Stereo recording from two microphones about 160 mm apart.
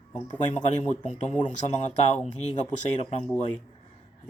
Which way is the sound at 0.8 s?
45° left (ahead or behind).